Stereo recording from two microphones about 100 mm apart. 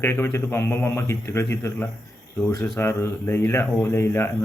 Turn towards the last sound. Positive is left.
turn(degrees=25)  # may be behind; listen again after turning